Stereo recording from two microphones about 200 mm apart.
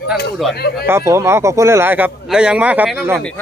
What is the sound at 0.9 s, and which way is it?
Speech, 15° right (ahead or behind).